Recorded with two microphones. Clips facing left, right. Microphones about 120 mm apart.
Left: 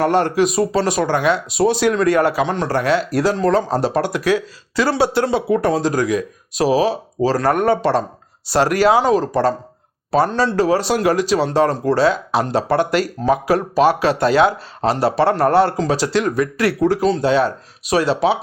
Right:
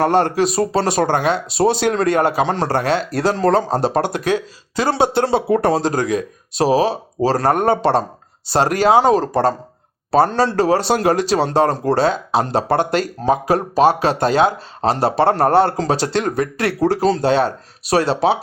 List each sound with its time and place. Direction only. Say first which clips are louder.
0.0 s speech: even; 30° right (ahead or behind)
5.2 s speech: right 1 dB; 35° right (ahead or behind)